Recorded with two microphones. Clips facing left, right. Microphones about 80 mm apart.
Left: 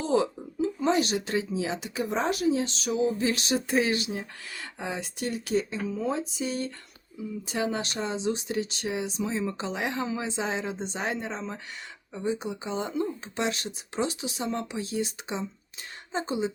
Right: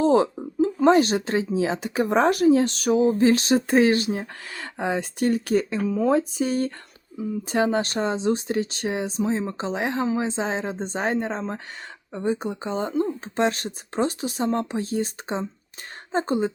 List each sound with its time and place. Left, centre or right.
0.0 s speech: right
5.7 s speech: right